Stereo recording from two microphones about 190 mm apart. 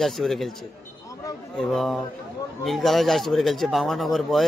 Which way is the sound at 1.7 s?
Centre (ahead or behind).